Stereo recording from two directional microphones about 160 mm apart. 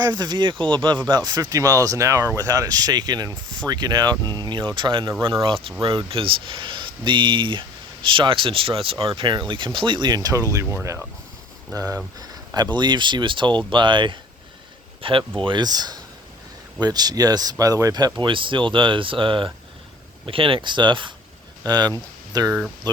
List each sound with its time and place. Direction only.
0.0 s speech: 25° right (ahead or behind)